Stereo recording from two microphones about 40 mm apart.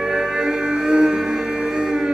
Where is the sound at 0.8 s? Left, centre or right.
Right.